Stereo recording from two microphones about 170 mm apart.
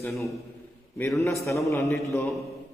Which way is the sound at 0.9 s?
15° left (ahead or behind).